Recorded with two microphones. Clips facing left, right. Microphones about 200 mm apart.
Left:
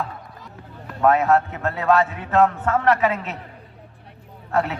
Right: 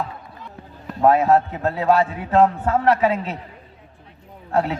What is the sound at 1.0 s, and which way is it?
A man's voice, 30° right (ahead or behind).